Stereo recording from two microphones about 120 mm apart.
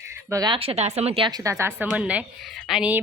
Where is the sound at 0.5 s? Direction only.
55° right (ahead or behind).